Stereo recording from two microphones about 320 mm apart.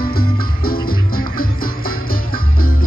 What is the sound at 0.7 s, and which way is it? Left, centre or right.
Music, left.